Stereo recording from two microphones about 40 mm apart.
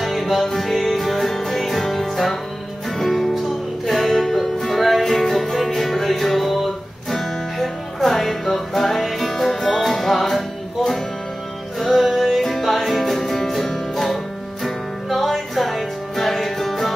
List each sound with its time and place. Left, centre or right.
0.0 s music: centre